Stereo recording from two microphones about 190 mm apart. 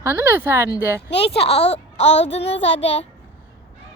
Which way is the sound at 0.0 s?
15° right (ahead or behind).